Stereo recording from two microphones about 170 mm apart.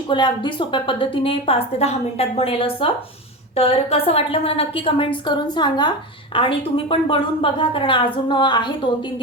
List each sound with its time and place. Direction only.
0.1 s a woman's voice: 25° left (ahead or behind)